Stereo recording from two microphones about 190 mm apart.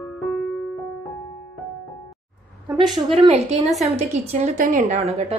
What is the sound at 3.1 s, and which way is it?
A woman's voice, 35° right (ahead or behind).